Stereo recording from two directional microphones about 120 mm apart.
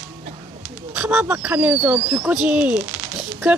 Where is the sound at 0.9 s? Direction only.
5° right (ahead or behind).